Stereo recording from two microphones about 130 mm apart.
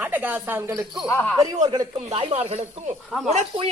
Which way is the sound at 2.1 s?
45° right (ahead or behind).